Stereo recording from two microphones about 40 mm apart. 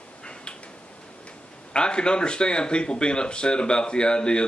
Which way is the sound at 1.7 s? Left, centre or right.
Left.